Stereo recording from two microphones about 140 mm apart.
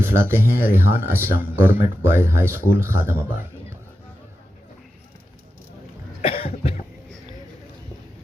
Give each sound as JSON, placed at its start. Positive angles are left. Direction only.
{"t": 0.0, "sound": "speech", "side_deg": -15}
{"t": 6.2, "sound": "cough", "side_deg": 45}